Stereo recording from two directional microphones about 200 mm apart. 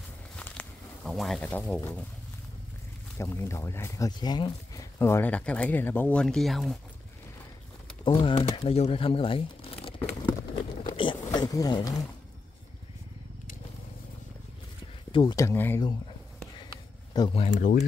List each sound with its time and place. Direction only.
0.4 s a sound: 5° left (ahead or behind)
3.2 s speech: 10° left (ahead or behind)
8.0 s speech: 25° left (ahead or behind)
10.8 s a sound: 25° left (ahead or behind)
15.1 s speech: 20° left (ahead or behind)
17.5 s speech: 40° left (ahead or behind)